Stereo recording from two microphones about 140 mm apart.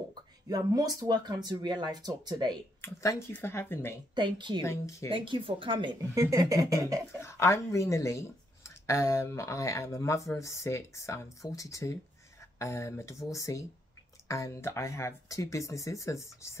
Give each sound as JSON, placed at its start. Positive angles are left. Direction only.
{"t": 0.1, "sound": "speech", "side_deg": -25}
{"t": 2.8, "sound": "speech", "side_deg": 20}
{"t": 4.1, "sound": "speech", "side_deg": -35}
{"t": 4.6, "sound": "speech", "side_deg": 20}
{"t": 5.1, "sound": "speech", "side_deg": -40}
{"t": 6.1, "sound": "speech", "side_deg": -25}
{"t": 7.2, "sound": "speech", "side_deg": 20}